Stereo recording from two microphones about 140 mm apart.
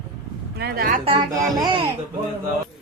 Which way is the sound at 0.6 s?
80° right.